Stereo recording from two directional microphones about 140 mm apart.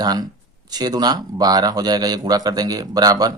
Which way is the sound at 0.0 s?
30° right (ahead or behind).